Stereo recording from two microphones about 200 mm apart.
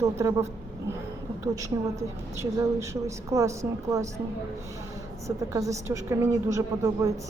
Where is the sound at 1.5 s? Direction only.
15° right (ahead or behind).